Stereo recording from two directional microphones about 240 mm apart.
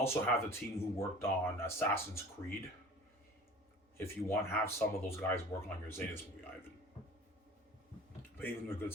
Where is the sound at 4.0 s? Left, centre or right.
Centre.